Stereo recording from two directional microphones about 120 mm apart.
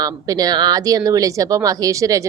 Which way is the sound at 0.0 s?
30° right (ahead or behind).